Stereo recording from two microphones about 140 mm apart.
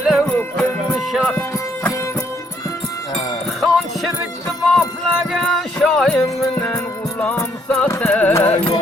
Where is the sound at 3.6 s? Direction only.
Centre (ahead or behind).